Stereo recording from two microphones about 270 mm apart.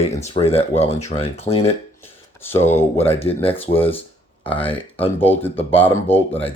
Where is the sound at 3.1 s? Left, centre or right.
Left.